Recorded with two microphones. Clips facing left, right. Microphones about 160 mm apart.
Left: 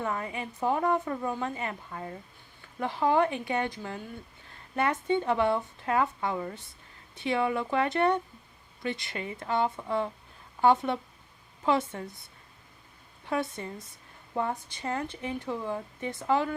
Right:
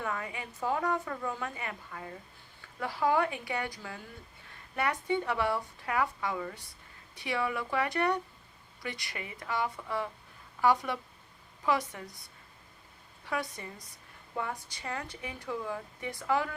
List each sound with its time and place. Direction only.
0.0 s speech: 20° left (ahead or behind)
13.2 s speech: 25° left (ahead or behind)